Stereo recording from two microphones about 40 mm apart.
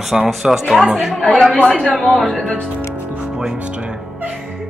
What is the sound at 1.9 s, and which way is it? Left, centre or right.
Speech, centre.